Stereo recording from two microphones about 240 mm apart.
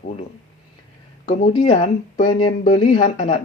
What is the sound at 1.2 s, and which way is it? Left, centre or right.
Speech, left.